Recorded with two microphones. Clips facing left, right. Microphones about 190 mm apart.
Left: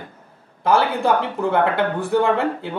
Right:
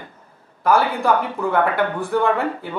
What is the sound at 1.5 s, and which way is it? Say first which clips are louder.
Speech: even; 25° left (ahead or behind).